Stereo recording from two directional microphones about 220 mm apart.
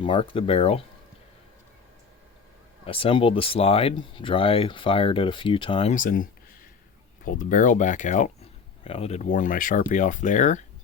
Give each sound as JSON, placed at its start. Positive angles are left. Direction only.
{"t": 0.0, "sound": "speech", "side_deg": 25}
{"t": 2.8, "sound": "speech", "side_deg": 25}
{"t": 7.3, "sound": "speech", "side_deg": 35}